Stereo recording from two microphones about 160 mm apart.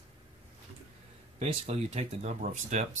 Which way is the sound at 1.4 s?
40° right (ahead or behind).